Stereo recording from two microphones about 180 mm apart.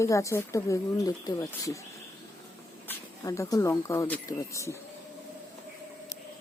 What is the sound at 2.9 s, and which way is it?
Speech, 15° left (ahead or behind).